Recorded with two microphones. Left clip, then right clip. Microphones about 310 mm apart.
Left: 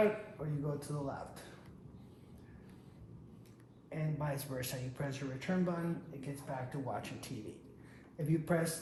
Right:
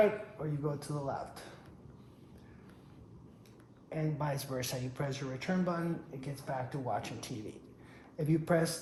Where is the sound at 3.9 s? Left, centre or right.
Right.